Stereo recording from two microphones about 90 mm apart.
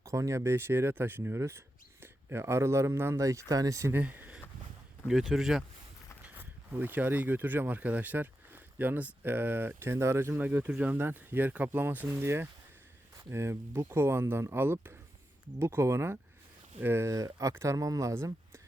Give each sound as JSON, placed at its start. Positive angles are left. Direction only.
{"t": 0.0, "sound": "speech", "side_deg": -35}
{"t": 3.9, "sound": "speech", "side_deg": -20}
{"t": 5.0, "sound": "speech", "side_deg": 0}
{"t": 6.2, "sound": "speech", "side_deg": -20}